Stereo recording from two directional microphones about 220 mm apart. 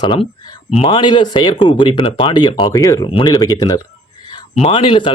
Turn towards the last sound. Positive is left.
turn(degrees=20)  # may be behind; listen again after turning